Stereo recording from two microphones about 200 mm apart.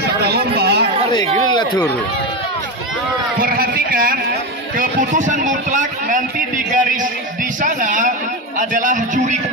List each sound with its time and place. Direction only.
0.2 s a sound: 50° right (ahead or behind)
1.5 s speech: 20° left (ahead or behind)
3.3 s a man's voice: 45° right (ahead or behind)